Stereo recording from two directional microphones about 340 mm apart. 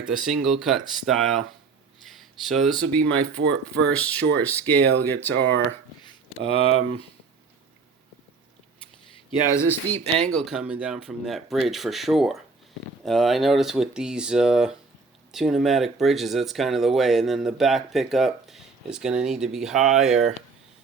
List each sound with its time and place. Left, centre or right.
0.3 s speech: centre
6.4 s speech: centre
8.8 s a sound: centre
10.2 s speech: centre